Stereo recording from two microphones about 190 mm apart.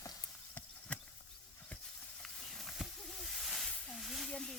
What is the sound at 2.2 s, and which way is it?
Hiss, centre (ahead or behind).